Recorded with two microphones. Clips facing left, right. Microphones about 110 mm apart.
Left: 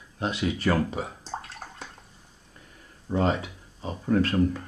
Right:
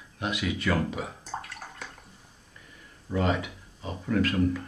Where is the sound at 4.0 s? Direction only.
35° left (ahead or behind).